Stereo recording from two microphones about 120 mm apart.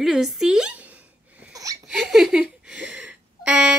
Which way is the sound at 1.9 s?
Centre (ahead or behind).